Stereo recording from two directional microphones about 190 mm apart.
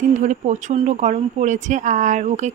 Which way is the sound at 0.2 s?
40° right (ahead or behind).